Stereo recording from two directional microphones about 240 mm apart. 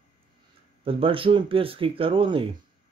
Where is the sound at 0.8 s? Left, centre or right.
Right.